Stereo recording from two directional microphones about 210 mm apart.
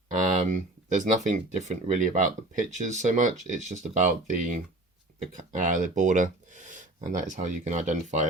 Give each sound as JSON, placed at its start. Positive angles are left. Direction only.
{"t": 0.1, "sound": "speech", "side_deg": -35}